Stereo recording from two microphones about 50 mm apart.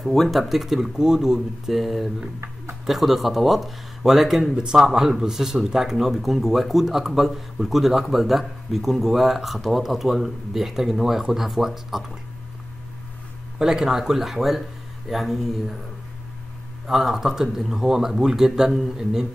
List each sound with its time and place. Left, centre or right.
0.0 s speech: centre
13.6 s speech: centre
16.8 s speech: centre